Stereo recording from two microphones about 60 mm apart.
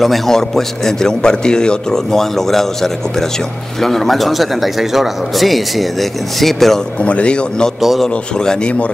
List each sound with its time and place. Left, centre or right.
0.0 s a man's voice: centre
7.0 s a man's voice: centre
7.8 s speech: centre
8.4 s a man's voice: centre